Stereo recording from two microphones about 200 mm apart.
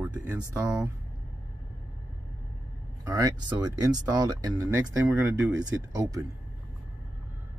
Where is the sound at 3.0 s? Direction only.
20° right (ahead or behind).